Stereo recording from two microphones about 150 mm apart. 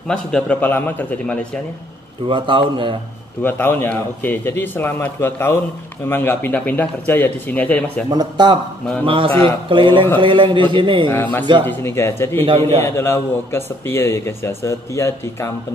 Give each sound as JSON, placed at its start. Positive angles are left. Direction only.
{"t": 0.3, "sound": "a man's voice", "side_deg": 10}
{"t": 2.2, "sound": "a man's voice", "side_deg": -35}
{"t": 3.4, "sound": "a man's voice", "side_deg": 15}
{"t": 8.1, "sound": "a man's voice", "side_deg": -30}
{"t": 11.1, "sound": "a man's voice", "side_deg": 15}